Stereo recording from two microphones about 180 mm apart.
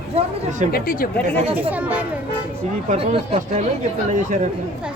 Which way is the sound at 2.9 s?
35° right (ahead or behind).